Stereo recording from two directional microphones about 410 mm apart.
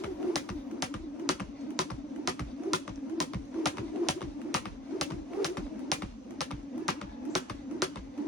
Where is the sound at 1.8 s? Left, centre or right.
Centre.